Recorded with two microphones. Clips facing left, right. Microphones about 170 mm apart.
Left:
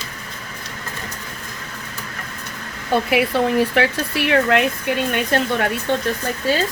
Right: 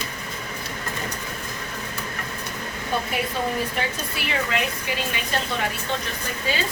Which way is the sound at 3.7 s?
75° left (ahead or behind).